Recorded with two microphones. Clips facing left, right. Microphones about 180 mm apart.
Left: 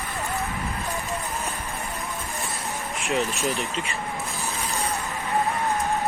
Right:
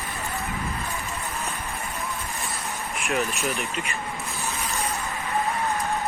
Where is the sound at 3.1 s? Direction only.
30° left (ahead or behind).